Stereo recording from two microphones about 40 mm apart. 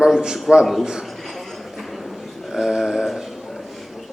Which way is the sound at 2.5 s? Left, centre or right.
Centre.